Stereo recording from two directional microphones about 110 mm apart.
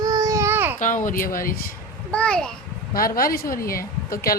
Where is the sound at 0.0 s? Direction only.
30° right (ahead or behind).